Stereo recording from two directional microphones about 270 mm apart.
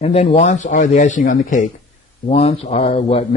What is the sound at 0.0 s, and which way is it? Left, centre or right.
A man's voice, left.